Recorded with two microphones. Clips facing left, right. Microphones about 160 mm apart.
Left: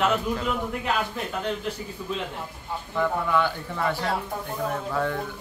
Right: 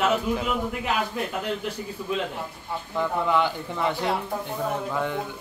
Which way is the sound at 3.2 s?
20° right (ahead or behind).